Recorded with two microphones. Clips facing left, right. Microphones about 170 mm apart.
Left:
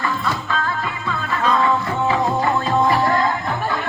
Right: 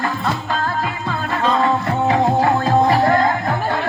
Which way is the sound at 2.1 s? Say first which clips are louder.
Right 4 dB; 50° right (ahead or behind).